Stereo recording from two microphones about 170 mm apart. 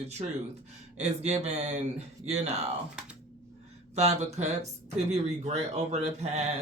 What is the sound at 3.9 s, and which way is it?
Speech, 40° right (ahead or behind).